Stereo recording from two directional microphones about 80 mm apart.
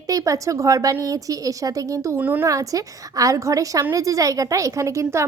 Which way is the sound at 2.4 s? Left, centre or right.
Right.